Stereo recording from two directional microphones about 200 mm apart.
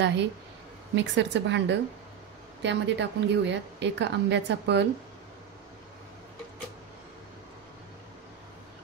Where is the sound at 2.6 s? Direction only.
60° right (ahead or behind).